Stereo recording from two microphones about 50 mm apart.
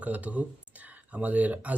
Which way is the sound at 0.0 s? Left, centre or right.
Right.